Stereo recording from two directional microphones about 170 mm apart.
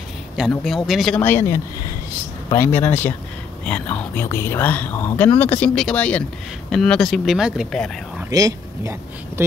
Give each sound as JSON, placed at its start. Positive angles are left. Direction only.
{"t": 0.5, "sound": "speech", "side_deg": 0}
{"t": 8.3, "sound": "speech", "side_deg": -20}